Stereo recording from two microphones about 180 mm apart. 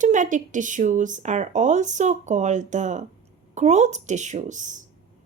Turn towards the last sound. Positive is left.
turn(degrees=-45)  # may be behind; listen again after turning